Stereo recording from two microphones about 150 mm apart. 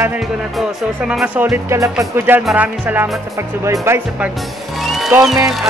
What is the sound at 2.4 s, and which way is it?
Speech, 10° right (ahead or behind).